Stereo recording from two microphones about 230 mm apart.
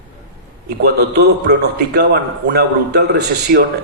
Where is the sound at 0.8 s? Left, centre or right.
Right.